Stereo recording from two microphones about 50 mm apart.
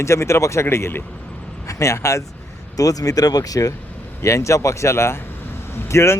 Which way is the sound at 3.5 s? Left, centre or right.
Left.